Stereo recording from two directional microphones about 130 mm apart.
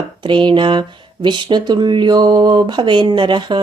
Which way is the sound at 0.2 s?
35° right (ahead or behind).